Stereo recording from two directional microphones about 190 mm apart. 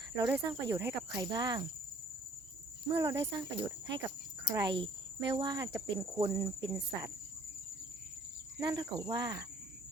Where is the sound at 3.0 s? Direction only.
15° right (ahead or behind).